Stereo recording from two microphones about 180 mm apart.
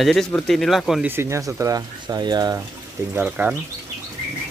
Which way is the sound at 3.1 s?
10° right (ahead or behind).